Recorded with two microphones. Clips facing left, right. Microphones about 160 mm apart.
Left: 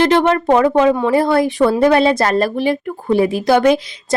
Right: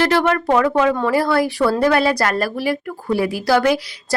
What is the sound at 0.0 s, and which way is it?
A woman's voice, 20° left (ahead or behind).